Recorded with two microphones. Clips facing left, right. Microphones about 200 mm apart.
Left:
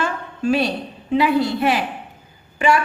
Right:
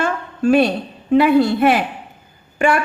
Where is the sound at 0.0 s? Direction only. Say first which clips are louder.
Right 4 dB; 50° right (ahead or behind).